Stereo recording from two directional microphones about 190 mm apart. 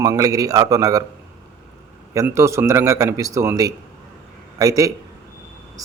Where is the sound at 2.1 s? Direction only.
15° right (ahead or behind).